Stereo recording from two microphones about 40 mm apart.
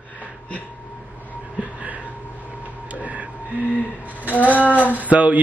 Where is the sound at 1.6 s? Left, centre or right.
Right.